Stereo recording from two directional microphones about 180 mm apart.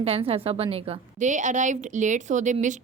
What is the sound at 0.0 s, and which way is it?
A woman's voice, 35° right (ahead or behind).